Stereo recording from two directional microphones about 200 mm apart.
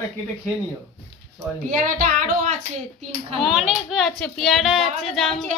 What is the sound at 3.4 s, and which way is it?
A woman's voice, centre (ahead or behind).